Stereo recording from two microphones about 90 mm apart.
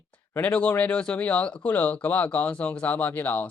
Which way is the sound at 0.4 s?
15° left (ahead or behind).